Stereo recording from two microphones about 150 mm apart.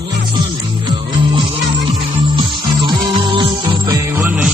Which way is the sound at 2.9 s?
35° right (ahead or behind).